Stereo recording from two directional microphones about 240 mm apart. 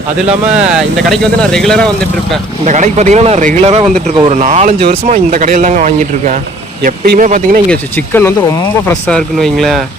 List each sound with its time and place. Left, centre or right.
0.3 s speech: centre
2.6 s speech: right
7.7 s speech: centre
9.0 s speech: centre